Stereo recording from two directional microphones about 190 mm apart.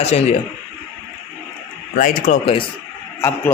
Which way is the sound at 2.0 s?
45° left (ahead or behind).